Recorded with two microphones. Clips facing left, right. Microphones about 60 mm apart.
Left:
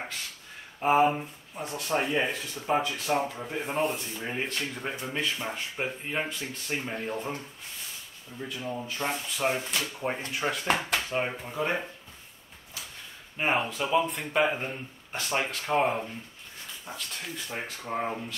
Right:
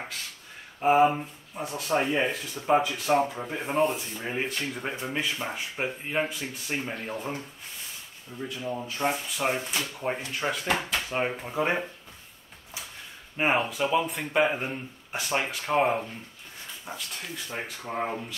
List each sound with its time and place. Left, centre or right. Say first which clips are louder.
0.7 s speech: right 2 dB; centre
8.8 s speech: right 3 dB; centre
9.6 s speech: right 1 dB; centre
10.3 s speech: left 1 dB; centre
11.1 s speech: right 1 dB; centre
13.5 s speech: right 1 dB; centre